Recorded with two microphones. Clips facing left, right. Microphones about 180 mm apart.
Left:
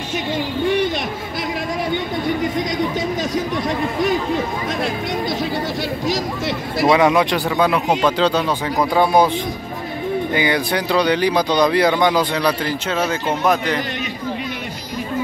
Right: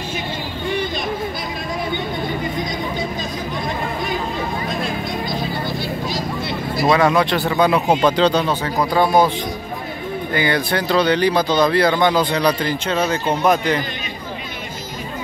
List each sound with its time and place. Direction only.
6.0 s speech: 85° left
6.9 s speech: 15° left (ahead or behind)
10.3 s speech: 15° left (ahead or behind)